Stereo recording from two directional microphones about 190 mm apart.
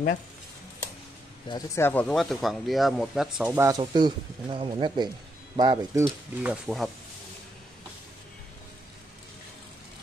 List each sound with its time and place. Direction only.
1.5 s speech: 25° left (ahead or behind)
1.8 s speech: 10° left (ahead or behind)
3.5 s speech: 15° right (ahead or behind)
6.0 s speech: 5° right (ahead or behind)